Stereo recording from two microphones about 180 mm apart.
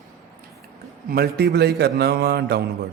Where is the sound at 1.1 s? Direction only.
60° right (ahead or behind).